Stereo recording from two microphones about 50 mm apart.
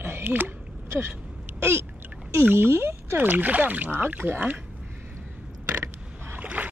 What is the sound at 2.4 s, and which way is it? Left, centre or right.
Speech, right.